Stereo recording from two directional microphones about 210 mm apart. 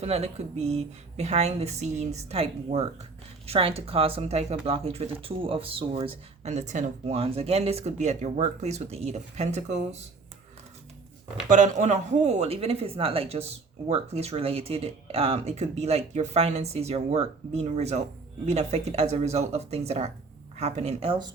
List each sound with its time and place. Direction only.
0.0 s speech: 30° right (ahead or behind)
11.4 s speech: 35° right (ahead or behind)